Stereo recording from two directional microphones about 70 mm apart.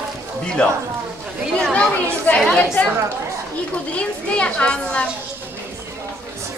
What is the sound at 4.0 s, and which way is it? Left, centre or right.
Speech, centre.